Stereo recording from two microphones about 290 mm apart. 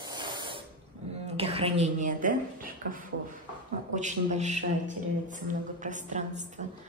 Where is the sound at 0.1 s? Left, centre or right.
Centre.